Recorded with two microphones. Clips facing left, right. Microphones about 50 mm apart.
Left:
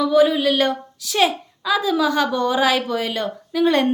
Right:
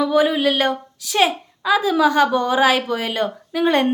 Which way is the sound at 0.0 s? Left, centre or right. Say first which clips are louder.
Left 1 dB; right.